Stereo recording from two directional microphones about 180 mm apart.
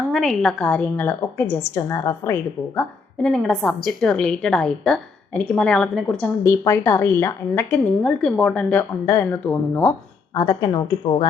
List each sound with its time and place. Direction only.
0.1 s a woman's voice: centre (ahead or behind)
3.2 s a woman's voice: centre (ahead or behind); by 11.3 s 25° left (ahead or behind)